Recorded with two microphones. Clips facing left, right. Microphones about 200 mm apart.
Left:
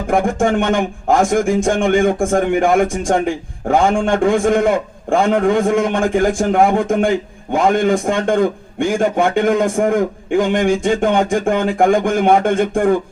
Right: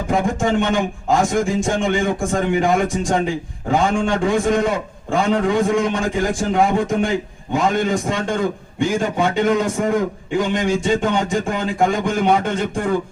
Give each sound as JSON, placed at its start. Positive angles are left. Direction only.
{"t": 0.1, "sound": "a man's voice", "side_deg": 55}